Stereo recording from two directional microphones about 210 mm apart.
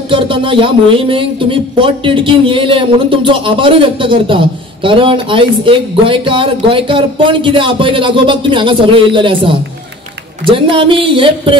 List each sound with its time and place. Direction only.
0.1 s speech: 25° right (ahead or behind)